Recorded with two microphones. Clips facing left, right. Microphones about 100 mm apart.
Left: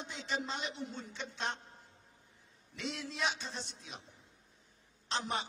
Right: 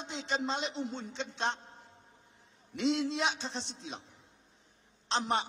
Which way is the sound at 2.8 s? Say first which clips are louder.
Right 8 dB; 25° right (ahead or behind).